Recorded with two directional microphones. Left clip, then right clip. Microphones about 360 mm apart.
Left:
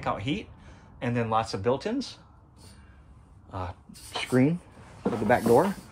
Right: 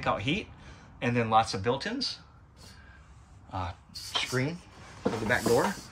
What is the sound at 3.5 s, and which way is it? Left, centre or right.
Speech, centre.